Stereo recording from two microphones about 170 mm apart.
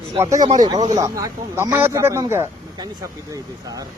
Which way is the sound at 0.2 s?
20° right (ahead or behind).